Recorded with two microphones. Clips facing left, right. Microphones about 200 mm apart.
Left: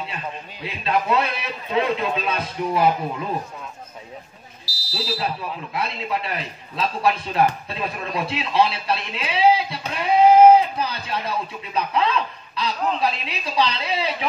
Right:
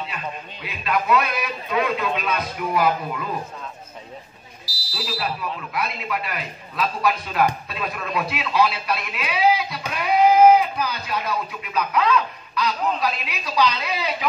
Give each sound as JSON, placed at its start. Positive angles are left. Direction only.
{"t": 0.7, "sound": "speech", "side_deg": 30}
{"t": 4.9, "sound": "speech", "side_deg": 25}